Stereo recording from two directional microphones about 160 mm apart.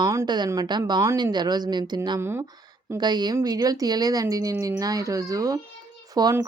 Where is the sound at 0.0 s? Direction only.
20° right (ahead or behind).